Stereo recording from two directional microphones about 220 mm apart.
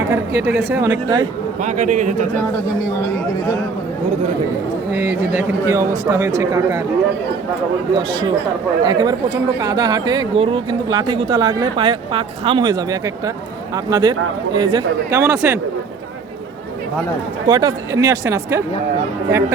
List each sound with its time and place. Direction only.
0.1 s a man's voice: 10° right (ahead or behind)
1.6 s a man's voice: 35° right (ahead or behind)
4.9 s a man's voice: 10° right (ahead or behind)
8.8 s speech: 20° right (ahead or behind)
17.4 s a man's voice: 20° right (ahead or behind)